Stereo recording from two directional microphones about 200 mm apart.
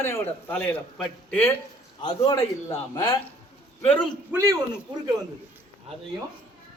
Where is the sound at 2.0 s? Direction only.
15° left (ahead or behind).